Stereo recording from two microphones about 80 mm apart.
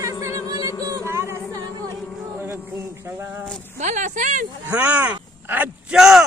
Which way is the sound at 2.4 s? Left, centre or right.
Right.